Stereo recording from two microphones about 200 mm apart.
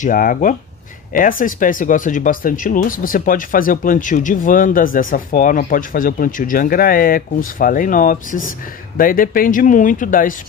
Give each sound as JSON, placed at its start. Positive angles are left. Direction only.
{"t": 0.0, "sound": "speech", "side_deg": 40}